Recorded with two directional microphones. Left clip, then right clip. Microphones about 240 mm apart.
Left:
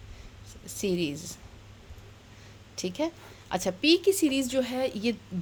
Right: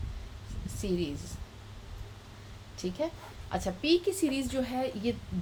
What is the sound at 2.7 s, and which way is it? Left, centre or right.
A woman's voice, left.